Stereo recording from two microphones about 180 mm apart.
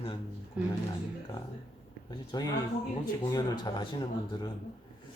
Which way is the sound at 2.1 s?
25° left (ahead or behind).